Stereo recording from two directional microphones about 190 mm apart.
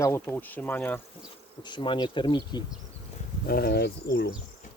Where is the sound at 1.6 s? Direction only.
25° left (ahead or behind).